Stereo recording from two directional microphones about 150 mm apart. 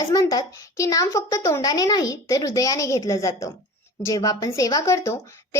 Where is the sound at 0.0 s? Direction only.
25° left (ahead or behind).